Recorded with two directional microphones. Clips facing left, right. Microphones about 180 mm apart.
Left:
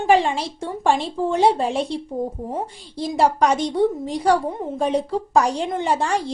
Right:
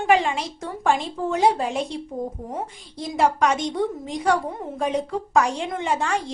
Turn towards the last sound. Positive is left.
turn(degrees=35)  # may be behind; listen again after turning